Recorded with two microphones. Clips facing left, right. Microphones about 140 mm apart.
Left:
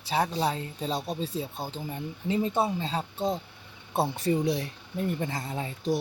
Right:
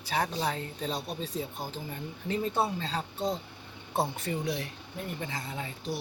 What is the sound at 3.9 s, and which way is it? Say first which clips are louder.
Speech: left 5 dB; 35° left (ahead or behind).